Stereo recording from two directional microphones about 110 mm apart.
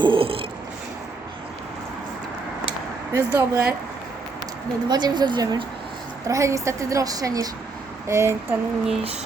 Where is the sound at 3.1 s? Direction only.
25° right (ahead or behind).